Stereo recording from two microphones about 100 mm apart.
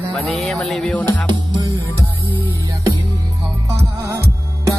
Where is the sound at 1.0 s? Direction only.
50° right (ahead or behind).